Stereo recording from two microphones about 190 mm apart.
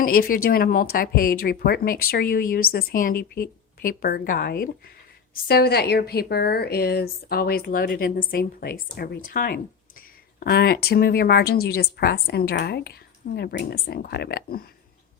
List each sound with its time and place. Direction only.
0.0 s a woman's voice: 50° left (ahead or behind)